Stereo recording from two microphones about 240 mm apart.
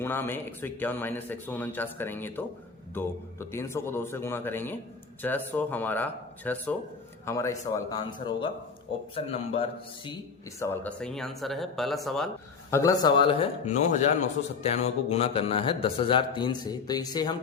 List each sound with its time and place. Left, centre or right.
0.0 s speech: centre
10.6 s speech: centre
12.7 s speech: centre